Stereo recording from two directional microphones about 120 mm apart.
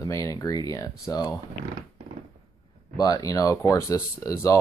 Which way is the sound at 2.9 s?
30° left (ahead or behind).